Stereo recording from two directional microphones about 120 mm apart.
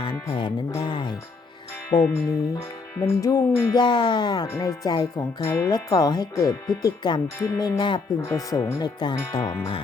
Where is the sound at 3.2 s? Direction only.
30° left (ahead or behind).